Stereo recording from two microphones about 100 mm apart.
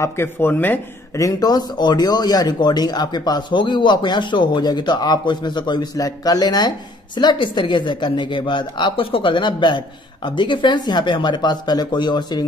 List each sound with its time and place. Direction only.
0.0 s speech: 25° left (ahead or behind)
1.1 s speech: 40° left (ahead or behind)